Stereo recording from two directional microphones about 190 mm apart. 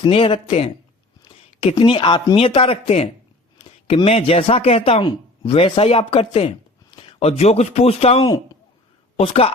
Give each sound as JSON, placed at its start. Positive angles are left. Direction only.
{"t": 0.0, "sound": "speech", "side_deg": 25}
{"t": 1.7, "sound": "a man's voice", "side_deg": 25}